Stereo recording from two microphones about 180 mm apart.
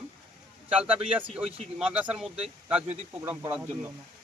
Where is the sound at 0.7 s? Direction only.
5° right (ahead or behind).